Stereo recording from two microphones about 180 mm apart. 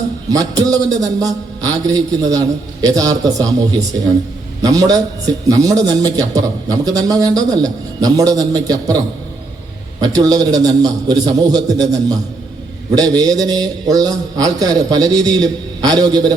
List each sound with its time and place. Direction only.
0.3 s a man's voice: 20° right (ahead or behind)
10.0 s a man's voice: 20° right (ahead or behind)